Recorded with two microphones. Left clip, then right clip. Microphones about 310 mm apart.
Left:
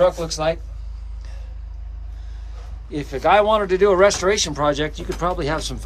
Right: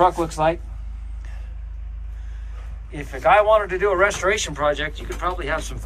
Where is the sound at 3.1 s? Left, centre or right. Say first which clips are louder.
Even; left.